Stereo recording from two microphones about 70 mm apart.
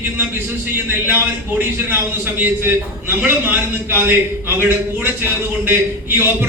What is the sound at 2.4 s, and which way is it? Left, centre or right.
A man's voice, right.